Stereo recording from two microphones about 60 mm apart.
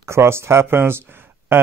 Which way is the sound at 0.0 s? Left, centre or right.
Right.